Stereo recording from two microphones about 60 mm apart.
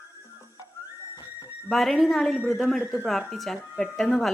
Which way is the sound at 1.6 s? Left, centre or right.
Centre.